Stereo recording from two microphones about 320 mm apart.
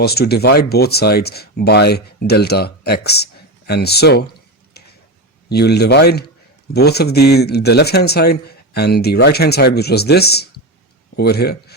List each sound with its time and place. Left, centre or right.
0.0 s speech: left
4.8 s tick-tock: left
5.5 s speech: left